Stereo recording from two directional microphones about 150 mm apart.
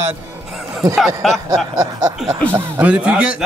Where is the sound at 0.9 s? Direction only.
Centre (ahead or behind).